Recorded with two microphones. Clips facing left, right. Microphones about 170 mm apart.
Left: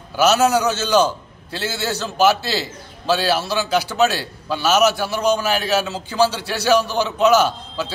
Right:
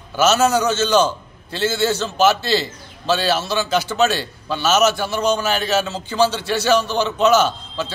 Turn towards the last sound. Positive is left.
turn(degrees=10)  # may be behind; listen again after turning